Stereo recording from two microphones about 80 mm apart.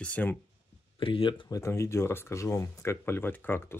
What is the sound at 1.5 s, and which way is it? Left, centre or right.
Speech, left.